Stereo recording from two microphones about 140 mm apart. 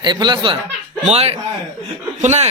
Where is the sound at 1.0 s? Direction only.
50° right (ahead or behind).